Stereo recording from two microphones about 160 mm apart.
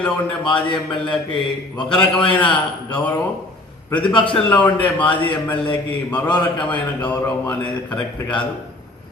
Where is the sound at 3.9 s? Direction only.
30° left (ahead or behind).